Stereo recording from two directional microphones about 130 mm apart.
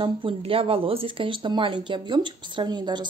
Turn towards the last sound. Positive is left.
turn(degrees=-35)  # may be behind; listen again after turning